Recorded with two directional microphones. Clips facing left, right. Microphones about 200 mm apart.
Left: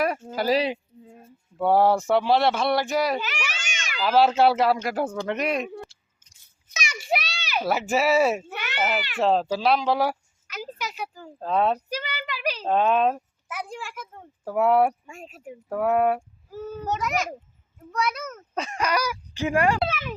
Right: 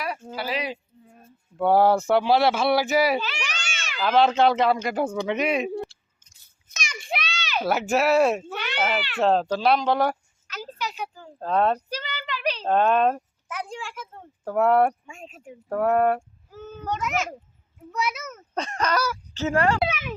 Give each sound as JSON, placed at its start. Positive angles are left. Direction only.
{"t": 0.0, "sound": "speech", "side_deg": 45}
{"t": 1.5, "sound": "speech", "side_deg": 0}
{"t": 3.2, "sound": "a sound", "side_deg": 10}
{"t": 3.9, "sound": "speech", "side_deg": 5}
{"t": 7.0, "sound": "speech", "side_deg": 5}
{"t": 11.9, "sound": "a child's voice", "side_deg": 10}
{"t": 18.5, "sound": "speech", "side_deg": 5}
{"t": 19.8, "sound": "speech", "side_deg": -5}